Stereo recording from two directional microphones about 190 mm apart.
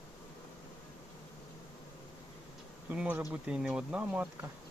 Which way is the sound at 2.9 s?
10° right (ahead or behind).